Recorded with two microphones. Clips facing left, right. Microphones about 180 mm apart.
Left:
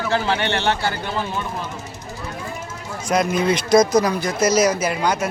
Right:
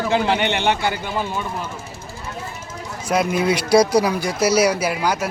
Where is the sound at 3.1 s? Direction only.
5° right (ahead or behind).